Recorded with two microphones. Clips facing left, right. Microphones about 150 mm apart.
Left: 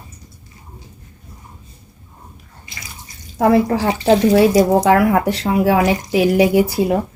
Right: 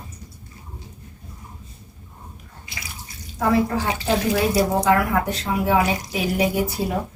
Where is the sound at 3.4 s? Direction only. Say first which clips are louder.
Left 6 dB; 75° left (ahead or behind).